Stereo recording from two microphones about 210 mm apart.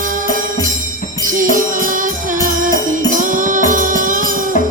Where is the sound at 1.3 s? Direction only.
40° right (ahead or behind).